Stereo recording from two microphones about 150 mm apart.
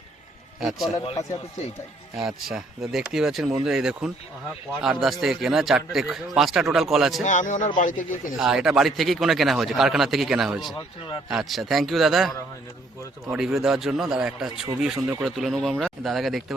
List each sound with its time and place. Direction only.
0.6 s a man's voice: 5° right (ahead or behind)
2.1 s a man's voice: 5° right (ahead or behind)
7.3 s speech: 55° left (ahead or behind)
8.4 s a man's voice: 5° right (ahead or behind)